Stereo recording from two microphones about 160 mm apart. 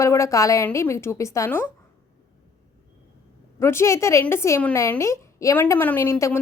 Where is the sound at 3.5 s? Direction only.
15° left (ahead or behind).